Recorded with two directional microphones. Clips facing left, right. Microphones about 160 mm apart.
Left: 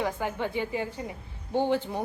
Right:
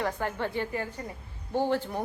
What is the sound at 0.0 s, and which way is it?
A woman's voice, 5° left (ahead or behind).